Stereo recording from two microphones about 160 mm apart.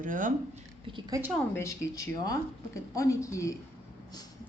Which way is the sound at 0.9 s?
25° right (ahead or behind).